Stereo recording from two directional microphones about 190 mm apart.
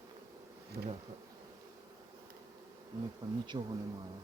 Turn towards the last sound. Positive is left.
turn(degrees=-20)  # may be behind; listen again after turning